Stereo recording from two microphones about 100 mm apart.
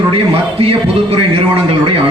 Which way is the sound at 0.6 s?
75° right (ahead or behind).